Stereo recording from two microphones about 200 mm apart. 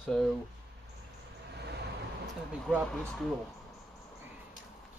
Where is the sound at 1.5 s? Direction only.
55° right (ahead or behind).